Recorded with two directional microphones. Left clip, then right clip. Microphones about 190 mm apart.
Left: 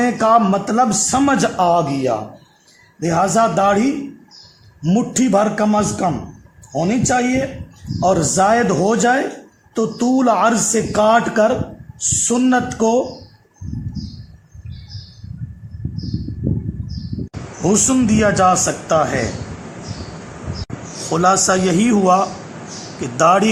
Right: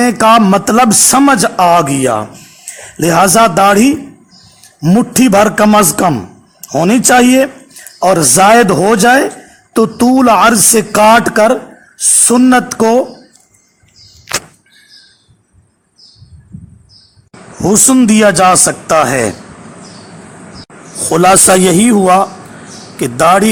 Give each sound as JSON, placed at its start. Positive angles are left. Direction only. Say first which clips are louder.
{"t": 0.0, "sound": "a man's voice", "louder": "right 6 dB", "side_deg": -35}
{"t": 7.9, "sound": "a man's voice", "louder": "right 7 dB", "side_deg": -35}
{"t": 17.6, "sound": "a man's voice", "louder": "right 7 dB", "side_deg": -35}
{"t": 21.1, "sound": "a man's voice", "louder": "right 8 dB", "side_deg": -40}